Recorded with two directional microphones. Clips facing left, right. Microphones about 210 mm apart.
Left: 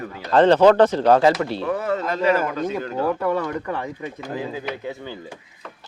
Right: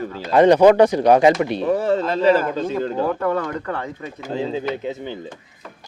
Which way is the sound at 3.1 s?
10° left (ahead or behind).